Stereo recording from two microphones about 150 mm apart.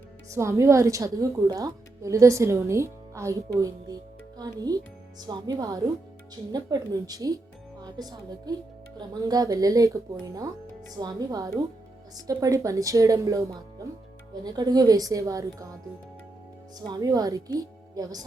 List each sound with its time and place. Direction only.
0.3 s a woman's voice: 20° right (ahead or behind)
16.9 s a woman's voice: 25° right (ahead or behind)